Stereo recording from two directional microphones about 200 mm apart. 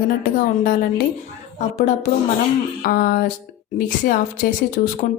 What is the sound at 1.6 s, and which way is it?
A woman's voice, 35° left (ahead or behind).